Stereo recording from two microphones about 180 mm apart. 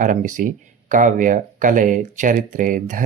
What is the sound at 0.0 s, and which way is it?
Speech, 45° right (ahead or behind).